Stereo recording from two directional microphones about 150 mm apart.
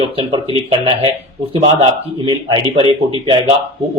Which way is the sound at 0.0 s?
35° right (ahead or behind).